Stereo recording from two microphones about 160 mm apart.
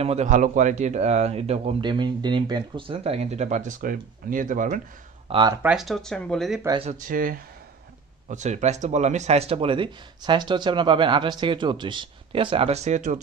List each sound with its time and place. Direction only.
0.0 s a man's voice: 45° right (ahead or behind)
5.5 s speech: 15° right (ahead or behind)
5.8 s speech: centre (ahead or behind)
6.8 s speech: 50° right (ahead or behind)
8.3 s speech: 45° right (ahead or behind)